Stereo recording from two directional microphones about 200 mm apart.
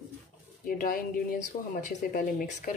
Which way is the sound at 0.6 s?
45° left (ahead or behind).